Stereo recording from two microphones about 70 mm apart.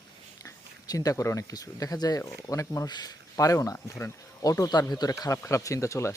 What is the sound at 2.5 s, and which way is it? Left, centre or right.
Speech, left.